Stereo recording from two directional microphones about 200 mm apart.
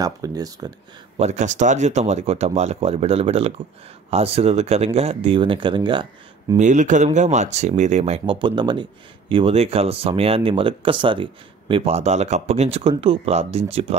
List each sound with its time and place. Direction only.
0.0 s speech: 20° right (ahead or behind)
1.1 s speech: 35° right (ahead or behind)
6.5 s speech: 40° right (ahead or behind)